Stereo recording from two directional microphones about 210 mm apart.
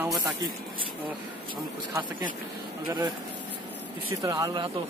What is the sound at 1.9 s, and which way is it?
Speech, 15° right (ahead or behind).